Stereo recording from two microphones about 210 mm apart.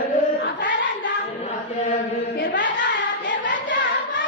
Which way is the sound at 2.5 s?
60° left (ahead or behind).